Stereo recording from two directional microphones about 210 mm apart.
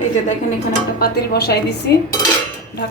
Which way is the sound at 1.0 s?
50° left (ahead or behind).